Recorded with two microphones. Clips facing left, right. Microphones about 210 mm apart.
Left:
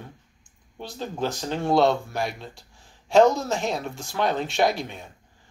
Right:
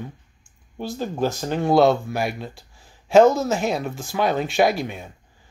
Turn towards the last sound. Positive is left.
turn(degrees=-5)  # may be behind; listen again after turning